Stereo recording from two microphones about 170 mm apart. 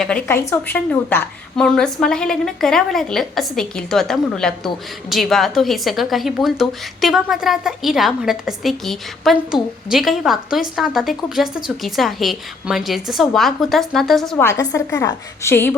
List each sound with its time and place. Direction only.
0.0 s a woman's voice: 10° left (ahead or behind)
14.4 s a woman's voice: 20° left (ahead or behind)